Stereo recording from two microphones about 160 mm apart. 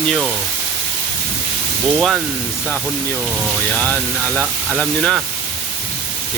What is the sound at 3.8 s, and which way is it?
Speech, 10° left (ahead or behind).